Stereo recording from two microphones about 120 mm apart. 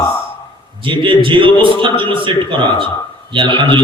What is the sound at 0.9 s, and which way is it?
A man's voice, 45° right (ahead or behind).